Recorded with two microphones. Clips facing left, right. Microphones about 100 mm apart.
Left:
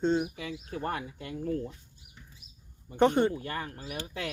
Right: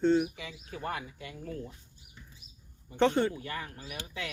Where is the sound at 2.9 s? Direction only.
15° left (ahead or behind).